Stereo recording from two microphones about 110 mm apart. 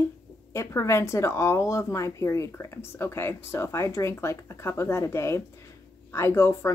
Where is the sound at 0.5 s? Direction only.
25° left (ahead or behind).